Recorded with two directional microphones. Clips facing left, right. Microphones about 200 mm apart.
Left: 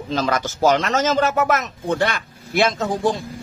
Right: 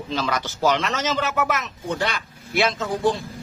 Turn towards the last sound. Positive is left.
turn(degrees=45)  # may be behind; listen again after turning